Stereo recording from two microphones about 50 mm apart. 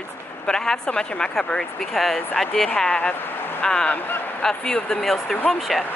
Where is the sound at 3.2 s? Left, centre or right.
Left.